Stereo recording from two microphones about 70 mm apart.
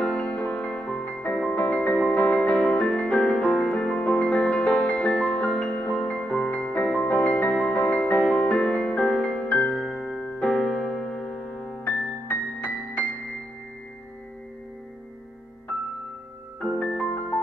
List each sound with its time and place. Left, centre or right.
0.0 s music: centre
1.0 s music: left
16.5 s piano: centre